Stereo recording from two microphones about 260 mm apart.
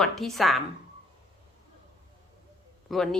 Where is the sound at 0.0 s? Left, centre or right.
Centre.